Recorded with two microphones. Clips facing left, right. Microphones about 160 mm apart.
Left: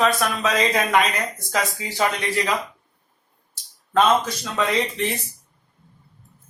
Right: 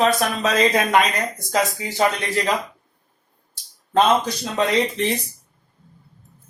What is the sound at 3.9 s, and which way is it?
Speech, 35° right (ahead or behind).